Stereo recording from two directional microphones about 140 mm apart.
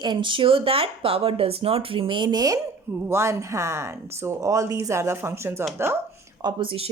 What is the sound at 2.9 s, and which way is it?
Speech, 15° right (ahead or behind).